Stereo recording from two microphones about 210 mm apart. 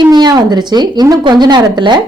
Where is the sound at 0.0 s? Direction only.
20° right (ahead or behind).